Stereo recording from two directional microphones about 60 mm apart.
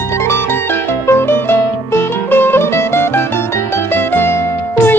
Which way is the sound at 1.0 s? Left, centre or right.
Left.